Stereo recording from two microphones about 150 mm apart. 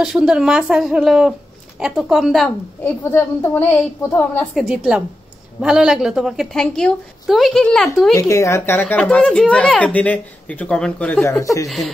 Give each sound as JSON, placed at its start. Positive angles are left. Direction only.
{"t": 0.0, "sound": "a woman's voice", "side_deg": -5}
{"t": 2.8, "sound": "speech", "side_deg": 15}
{"t": 4.6, "sound": "a woman's voice", "side_deg": -5}
{"t": 8.1, "sound": "speech", "side_deg": 20}
{"t": 11.2, "sound": "speech", "side_deg": 20}